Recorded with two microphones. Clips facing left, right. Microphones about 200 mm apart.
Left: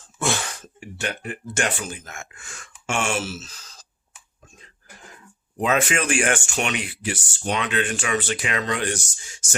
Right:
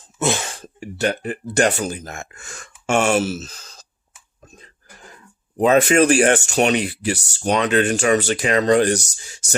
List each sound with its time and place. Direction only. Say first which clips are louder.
0.0 s a sound: right 4 dB; 20° right (ahead or behind)
0.6 s speech: right 9 dB; 40° right (ahead or behind)
5.5 s speech: right 8 dB; 40° right (ahead or behind)